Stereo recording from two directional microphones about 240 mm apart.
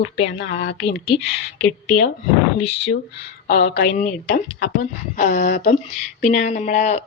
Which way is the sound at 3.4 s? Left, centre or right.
Left.